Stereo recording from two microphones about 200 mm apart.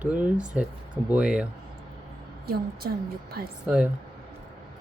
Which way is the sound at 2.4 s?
50° right (ahead or behind).